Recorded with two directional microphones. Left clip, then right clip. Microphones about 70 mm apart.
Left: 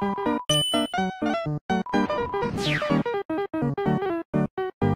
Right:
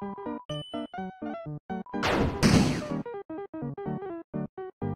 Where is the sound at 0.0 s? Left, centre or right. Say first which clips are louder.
Left 11 dB; centre.